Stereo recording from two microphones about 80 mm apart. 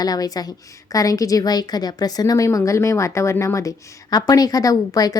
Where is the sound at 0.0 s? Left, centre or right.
Left.